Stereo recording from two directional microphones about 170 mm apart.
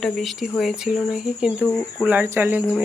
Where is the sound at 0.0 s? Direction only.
Centre (ahead or behind).